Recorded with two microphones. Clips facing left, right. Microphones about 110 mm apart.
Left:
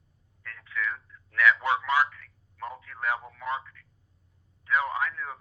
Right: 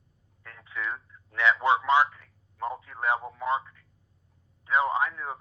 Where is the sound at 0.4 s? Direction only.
25° right (ahead or behind).